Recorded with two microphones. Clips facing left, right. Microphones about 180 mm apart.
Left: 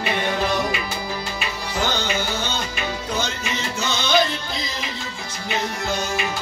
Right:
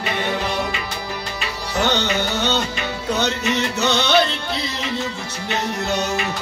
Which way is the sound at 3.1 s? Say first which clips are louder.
Right 5 dB; 70° right (ahead or behind).